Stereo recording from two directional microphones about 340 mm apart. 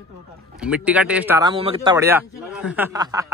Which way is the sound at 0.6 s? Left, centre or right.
Centre.